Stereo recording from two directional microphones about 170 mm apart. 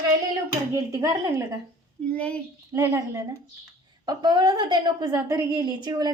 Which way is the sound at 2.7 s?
15° right (ahead or behind).